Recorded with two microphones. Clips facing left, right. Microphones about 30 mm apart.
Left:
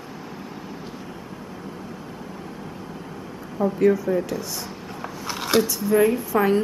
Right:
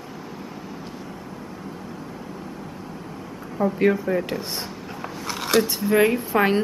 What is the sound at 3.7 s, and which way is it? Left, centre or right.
Speech, right.